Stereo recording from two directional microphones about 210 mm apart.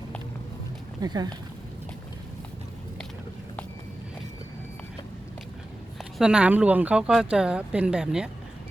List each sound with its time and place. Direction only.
1.0 s speech: 20° right (ahead or behind)
6.0 s speech: centre (ahead or behind)